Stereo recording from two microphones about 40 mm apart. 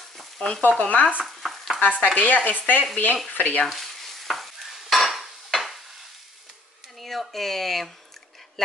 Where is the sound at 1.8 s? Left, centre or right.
Left.